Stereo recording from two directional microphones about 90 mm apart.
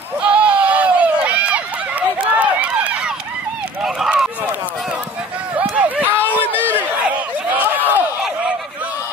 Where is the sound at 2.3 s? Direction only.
15° right (ahead or behind).